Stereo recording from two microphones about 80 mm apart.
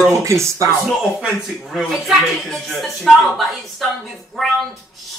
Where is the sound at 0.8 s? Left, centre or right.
Centre.